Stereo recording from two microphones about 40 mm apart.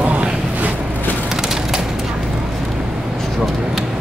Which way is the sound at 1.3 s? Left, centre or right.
Centre.